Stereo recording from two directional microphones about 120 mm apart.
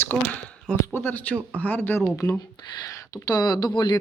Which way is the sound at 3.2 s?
35° left (ahead or behind).